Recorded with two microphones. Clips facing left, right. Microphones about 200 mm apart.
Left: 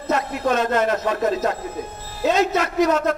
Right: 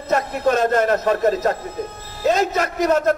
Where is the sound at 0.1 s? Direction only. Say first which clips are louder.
Right 2 dB; 45° right (ahead or behind).